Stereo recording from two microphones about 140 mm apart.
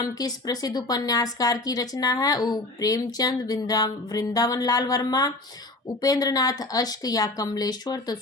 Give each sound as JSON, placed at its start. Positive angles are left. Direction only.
{"t": 0.0, "sound": "a woman's voice", "side_deg": 25}